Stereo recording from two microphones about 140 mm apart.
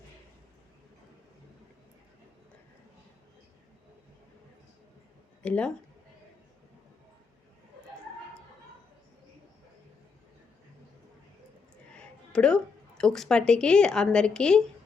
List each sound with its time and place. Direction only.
5.4 s speech: 5° left (ahead or behind)
11.9 s a sound: 5° left (ahead or behind)
13.0 s a woman's voice: 5° left (ahead or behind)